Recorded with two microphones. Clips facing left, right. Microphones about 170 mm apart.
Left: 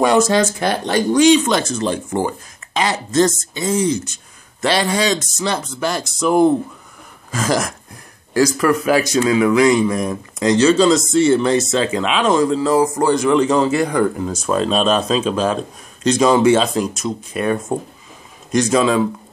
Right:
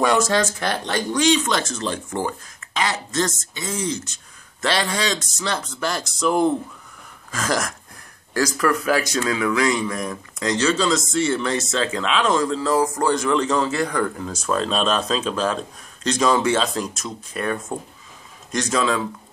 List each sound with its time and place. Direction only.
0.0 s speech: 15° left (ahead or behind)
3.3 s speech: 30° left (ahead or behind)
3.7 s speech: 10° left (ahead or behind)
7.2 s a sound: 10° left (ahead or behind)
8.3 s speech: 10° left (ahead or behind)
11.7 s speech: 15° left (ahead or behind)